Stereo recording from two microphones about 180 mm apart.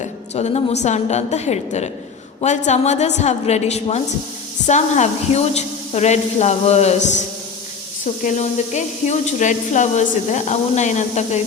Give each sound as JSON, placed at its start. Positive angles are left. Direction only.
{"t": 0.0, "sound": "speech", "side_deg": 35}
{"t": 8.2, "sound": "speech", "side_deg": 45}